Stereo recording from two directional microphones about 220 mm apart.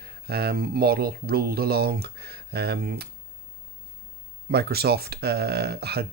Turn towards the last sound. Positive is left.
turn(degrees=-45)  # may be behind; listen again after turning